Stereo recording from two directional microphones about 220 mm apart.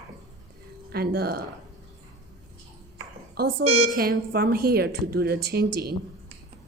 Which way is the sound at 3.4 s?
45° right (ahead or behind).